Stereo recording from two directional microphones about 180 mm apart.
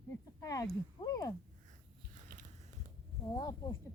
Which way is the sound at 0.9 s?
20° left (ahead or behind).